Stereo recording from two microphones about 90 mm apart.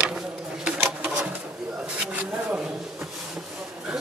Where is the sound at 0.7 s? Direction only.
10° right (ahead or behind).